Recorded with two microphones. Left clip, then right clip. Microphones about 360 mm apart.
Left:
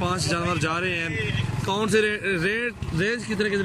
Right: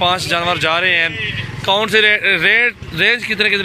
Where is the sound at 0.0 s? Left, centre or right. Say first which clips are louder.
Right 10 dB; centre.